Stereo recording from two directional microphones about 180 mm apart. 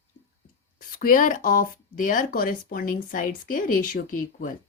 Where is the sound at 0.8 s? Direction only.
50° left (ahead or behind).